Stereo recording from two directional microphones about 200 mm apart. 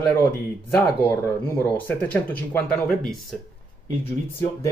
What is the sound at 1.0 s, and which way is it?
Speech, 10° left (ahead or behind).